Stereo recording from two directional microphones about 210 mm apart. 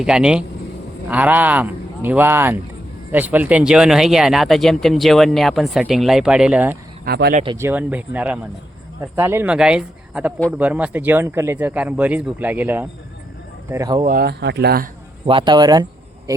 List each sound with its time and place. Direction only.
0.0 s speech: 5° right (ahead or behind)
7.0 s speech: 45° right (ahead or behind)
7.4 s speech: 15° right (ahead or behind)
14.0 s speech: 45° right (ahead or behind)
15.3 s speech: 25° right (ahead or behind)